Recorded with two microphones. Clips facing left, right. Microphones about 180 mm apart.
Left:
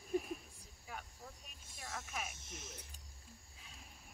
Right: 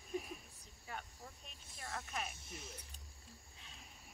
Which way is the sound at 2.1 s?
5° left (ahead or behind).